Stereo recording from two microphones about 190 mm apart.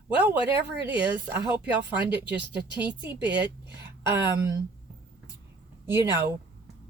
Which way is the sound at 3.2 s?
65° right (ahead or behind).